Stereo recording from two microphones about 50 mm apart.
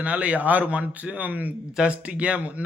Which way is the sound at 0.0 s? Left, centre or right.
Right.